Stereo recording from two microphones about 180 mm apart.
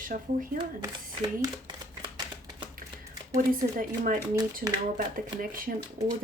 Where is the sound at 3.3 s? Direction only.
50° right (ahead or behind).